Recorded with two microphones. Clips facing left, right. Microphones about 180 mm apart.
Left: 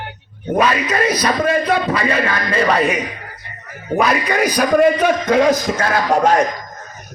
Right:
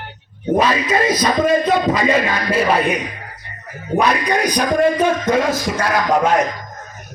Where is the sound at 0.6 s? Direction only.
25° right (ahead or behind).